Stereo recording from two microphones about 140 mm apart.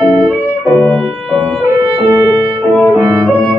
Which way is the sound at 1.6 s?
15° right (ahead or behind).